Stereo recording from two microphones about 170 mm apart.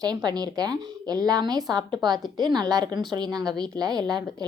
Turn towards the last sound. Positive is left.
turn(degrees=-25)  # may be behind; listen again after turning